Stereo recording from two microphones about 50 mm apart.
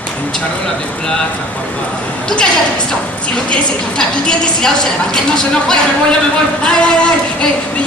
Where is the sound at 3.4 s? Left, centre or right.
Centre.